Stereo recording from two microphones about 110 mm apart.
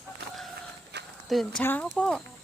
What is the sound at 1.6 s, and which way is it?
Speech, 15° left (ahead or behind).